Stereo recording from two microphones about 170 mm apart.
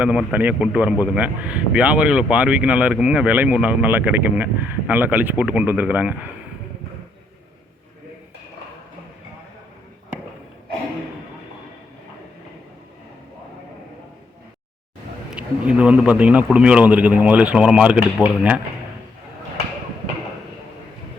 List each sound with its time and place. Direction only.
0.0 s speech: 5° right (ahead or behind)
15.3 s speech: 5° right (ahead or behind)